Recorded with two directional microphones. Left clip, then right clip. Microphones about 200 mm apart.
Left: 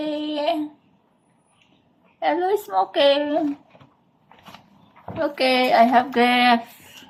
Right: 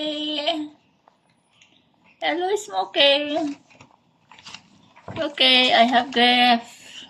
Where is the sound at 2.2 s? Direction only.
Centre (ahead or behind).